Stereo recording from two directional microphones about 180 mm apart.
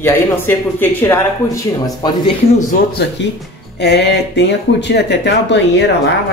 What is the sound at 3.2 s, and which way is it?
Speech, 80° left.